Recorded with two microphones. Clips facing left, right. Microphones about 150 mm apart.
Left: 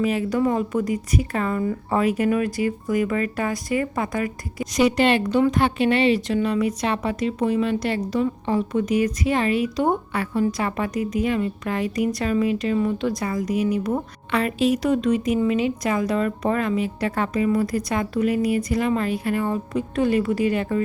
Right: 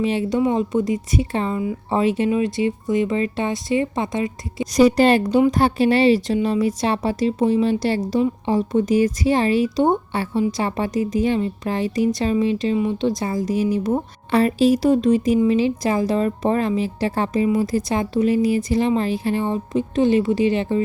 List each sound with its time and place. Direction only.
0.0 s a woman's voice: 30° right (ahead or behind)
4.8 s a woman's voice: 35° right (ahead or behind)